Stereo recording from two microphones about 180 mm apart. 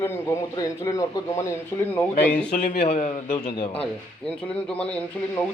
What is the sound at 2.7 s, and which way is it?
Speech, 35° left (ahead or behind).